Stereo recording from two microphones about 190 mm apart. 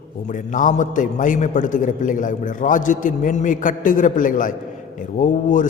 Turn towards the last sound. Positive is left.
turn(degrees=45)  # may be behind; listen again after turning